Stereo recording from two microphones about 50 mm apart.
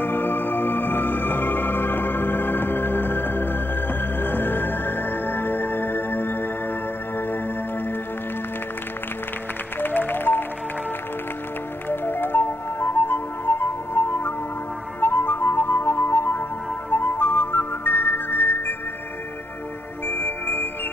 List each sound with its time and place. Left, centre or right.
0.0 s music: left
9.8 s music: left
11.9 s music: left
20.1 s music: left